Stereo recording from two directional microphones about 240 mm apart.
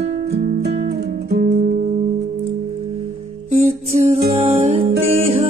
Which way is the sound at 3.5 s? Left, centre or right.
Right.